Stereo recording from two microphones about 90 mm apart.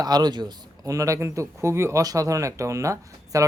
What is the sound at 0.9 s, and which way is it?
Speech, 35° right (ahead or behind).